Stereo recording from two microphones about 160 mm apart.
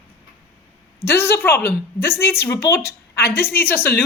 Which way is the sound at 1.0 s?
15° left (ahead or behind).